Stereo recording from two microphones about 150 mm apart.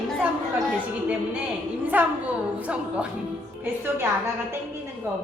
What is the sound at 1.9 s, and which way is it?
A woman's voice, 10° right (ahead or behind).